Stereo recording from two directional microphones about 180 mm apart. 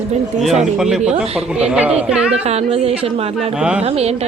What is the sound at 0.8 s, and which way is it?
Speech, 5° right (ahead or behind).